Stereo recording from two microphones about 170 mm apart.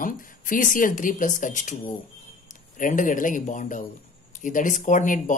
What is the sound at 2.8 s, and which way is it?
Speech, 50° left (ahead or behind).